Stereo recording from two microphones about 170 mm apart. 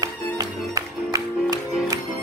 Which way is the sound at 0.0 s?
20° right (ahead or behind).